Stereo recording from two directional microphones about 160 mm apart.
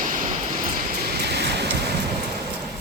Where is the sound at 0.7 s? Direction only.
70° right (ahead or behind); by 1.9 s 90° right.